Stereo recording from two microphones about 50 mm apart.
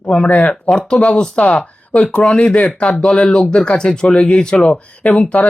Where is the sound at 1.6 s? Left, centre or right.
Left.